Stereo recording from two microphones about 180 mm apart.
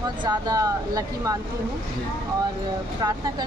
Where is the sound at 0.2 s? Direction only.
20° right (ahead or behind).